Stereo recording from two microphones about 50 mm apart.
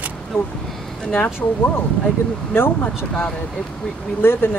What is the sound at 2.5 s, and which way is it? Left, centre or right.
Speech, left.